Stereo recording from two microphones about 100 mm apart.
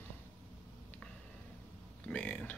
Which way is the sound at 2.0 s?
10° left (ahead or behind).